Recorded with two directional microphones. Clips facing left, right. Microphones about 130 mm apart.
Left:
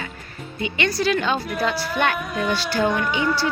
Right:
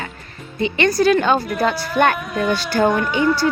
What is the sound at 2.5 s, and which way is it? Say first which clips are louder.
Speech: right 4 dB; 50° right (ahead or behind).